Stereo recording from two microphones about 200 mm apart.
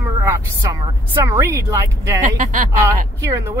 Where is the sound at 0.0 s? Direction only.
15° right (ahead or behind).